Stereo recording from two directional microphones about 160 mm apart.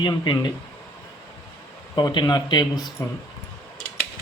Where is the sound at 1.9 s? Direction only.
30° left (ahead or behind).